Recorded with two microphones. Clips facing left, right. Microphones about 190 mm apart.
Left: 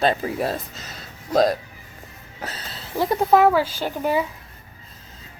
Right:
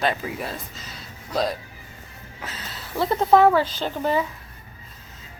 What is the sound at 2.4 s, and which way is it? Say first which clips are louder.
Music: left 3 dB; 35° left (ahead or behind).